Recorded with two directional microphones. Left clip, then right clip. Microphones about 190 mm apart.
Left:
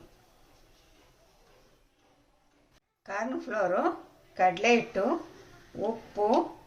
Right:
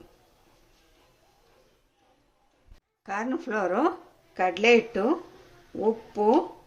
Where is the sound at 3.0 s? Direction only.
60° right (ahead or behind).